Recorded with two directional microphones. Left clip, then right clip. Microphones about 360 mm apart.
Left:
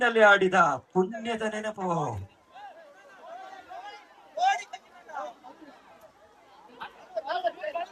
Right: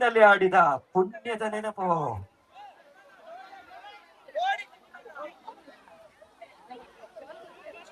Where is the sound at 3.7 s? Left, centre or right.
Left.